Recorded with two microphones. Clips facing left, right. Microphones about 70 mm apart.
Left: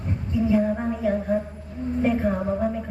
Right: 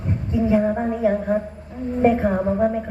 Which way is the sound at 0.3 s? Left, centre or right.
Right.